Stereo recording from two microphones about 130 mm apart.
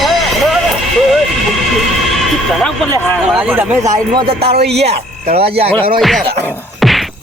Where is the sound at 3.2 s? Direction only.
10° right (ahead or behind).